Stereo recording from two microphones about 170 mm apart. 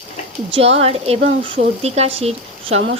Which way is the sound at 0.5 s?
35° right (ahead or behind).